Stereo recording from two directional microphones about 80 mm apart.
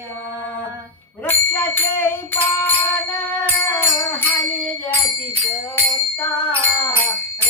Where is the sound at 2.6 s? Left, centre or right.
Left.